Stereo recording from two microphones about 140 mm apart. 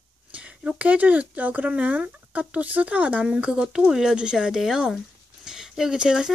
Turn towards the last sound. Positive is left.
turn(degrees=-5)  # may be behind; listen again after turning